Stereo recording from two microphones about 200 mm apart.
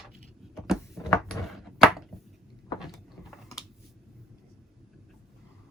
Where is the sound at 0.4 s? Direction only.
Centre (ahead or behind).